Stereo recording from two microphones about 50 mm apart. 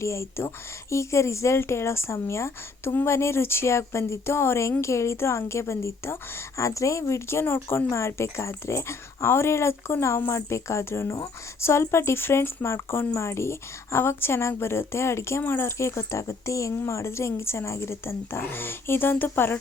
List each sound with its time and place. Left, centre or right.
0.0 s a woman's voice: left
1.5 s a woman's voice: left
6.6 s a woman's voice: left
7.9 s a woman's voice: left
15.8 s a woman's voice: left